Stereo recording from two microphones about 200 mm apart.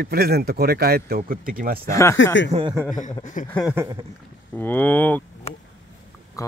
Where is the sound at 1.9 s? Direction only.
15° left (ahead or behind).